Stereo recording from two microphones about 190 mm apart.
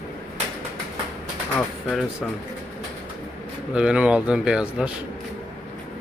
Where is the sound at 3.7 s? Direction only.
5° right (ahead or behind).